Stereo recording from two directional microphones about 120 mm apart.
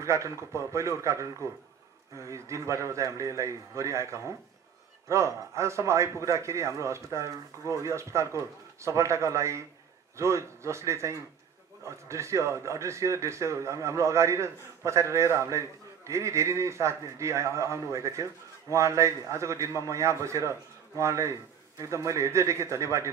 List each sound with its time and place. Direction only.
0.0 s a man's voice: 25° right (ahead or behind)